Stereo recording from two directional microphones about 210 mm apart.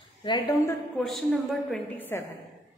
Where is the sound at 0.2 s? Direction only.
20° left (ahead or behind).